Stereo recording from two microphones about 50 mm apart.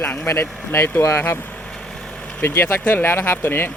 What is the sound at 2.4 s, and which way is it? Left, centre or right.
Speech, left.